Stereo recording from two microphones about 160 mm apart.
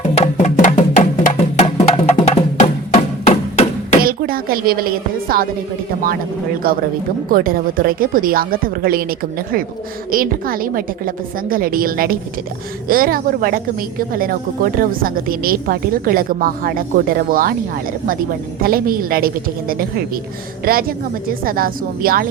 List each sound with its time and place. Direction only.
0.1 s music: 45° left (ahead or behind)
4.0 s speech: 65° right (ahead or behind)
6.6 s a woman's voice: 65° right (ahead or behind)
18.6 s a woman's voice: 65° right (ahead or behind)